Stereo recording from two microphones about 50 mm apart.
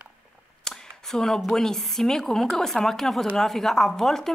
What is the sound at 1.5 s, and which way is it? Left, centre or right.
A woman's voice, centre.